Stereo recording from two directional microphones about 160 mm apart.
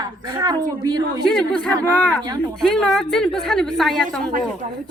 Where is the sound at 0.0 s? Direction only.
25° right (ahead or behind).